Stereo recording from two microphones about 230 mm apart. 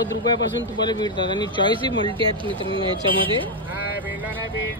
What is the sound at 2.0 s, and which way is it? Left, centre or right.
Speech, right.